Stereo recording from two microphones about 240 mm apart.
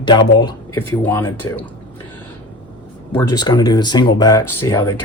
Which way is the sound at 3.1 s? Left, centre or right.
Centre.